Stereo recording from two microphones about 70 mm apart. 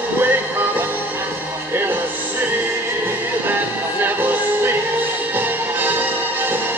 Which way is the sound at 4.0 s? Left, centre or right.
Right.